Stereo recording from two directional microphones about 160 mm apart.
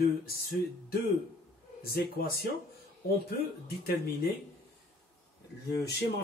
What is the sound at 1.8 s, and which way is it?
Speech, 70° left (ahead or behind).